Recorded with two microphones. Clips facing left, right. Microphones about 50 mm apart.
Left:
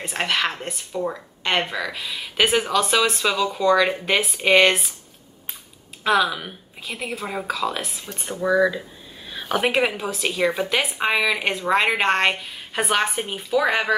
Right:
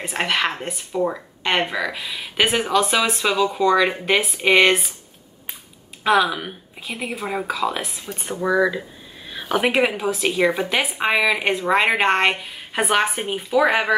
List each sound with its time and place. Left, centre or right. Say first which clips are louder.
0.0 s speech: right 1 dB; centre
6.0 s speech: right 2 dB; centre